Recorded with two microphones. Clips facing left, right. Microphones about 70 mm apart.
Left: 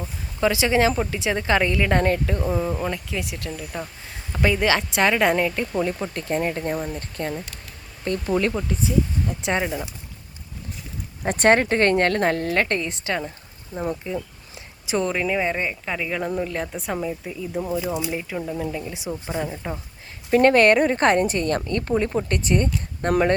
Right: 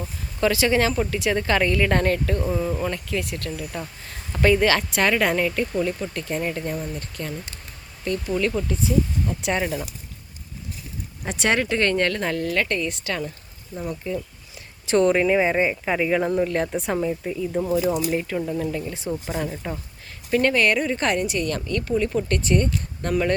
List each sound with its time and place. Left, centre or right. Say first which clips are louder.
0.0 s a woman's voice: even; centre
5.7 s a woman's voice: even; left
6.7 s a woman's voice: left 2 dB; left
11.2 s speech: left 5 dB; left
13.7 s speech: left 3 dB; left
14.8 s speech: right 5 dB; centre
20.3 s a woman's voice: left 5 dB; left